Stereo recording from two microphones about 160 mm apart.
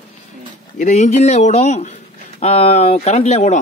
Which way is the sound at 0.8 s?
45° left (ahead or behind).